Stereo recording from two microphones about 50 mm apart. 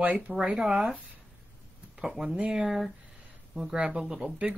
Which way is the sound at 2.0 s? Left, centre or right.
Centre.